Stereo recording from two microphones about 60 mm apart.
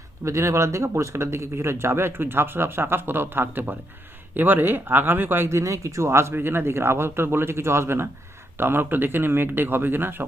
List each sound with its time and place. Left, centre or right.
0.3 s speech: right